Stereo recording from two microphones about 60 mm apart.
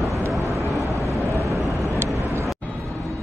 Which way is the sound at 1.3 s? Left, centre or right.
Right.